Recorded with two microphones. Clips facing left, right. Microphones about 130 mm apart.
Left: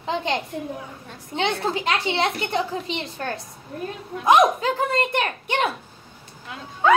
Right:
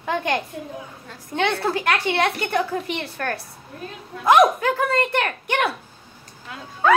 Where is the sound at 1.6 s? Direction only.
20° left (ahead or behind).